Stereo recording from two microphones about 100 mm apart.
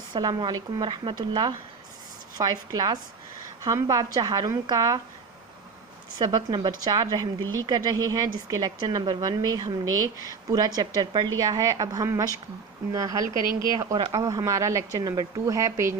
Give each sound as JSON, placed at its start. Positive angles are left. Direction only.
{"t": 0.1, "sound": "a woman's voice", "side_deg": -45}
{"t": 6.1, "sound": "a woman's voice", "side_deg": -45}